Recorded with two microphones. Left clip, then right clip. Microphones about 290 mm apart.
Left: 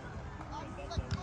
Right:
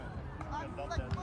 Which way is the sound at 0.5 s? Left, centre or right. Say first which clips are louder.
Right 4 dB; right.